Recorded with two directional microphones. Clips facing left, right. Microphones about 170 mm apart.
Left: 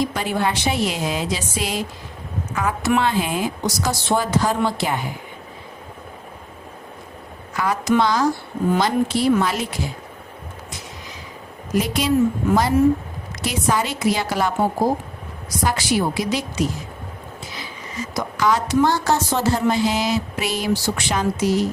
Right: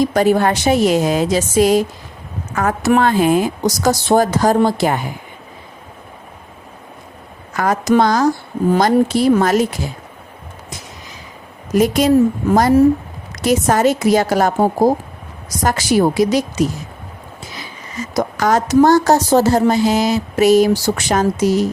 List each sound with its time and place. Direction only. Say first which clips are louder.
0.0 s a woman's voice: right 8 dB; 40° right (ahead or behind)
7.5 s a woman's voice: right 5 dB; 45° right (ahead or behind)
11.7 s a woman's voice: right 7 dB; 45° right (ahead or behind)
18.1 s a woman's voice: right 5 dB; 45° right (ahead or behind)